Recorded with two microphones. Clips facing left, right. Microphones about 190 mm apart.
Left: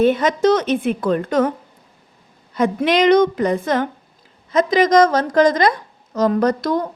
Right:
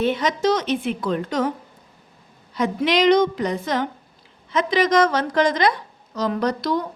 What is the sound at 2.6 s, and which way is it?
A woman's voice, 50° left (ahead or behind).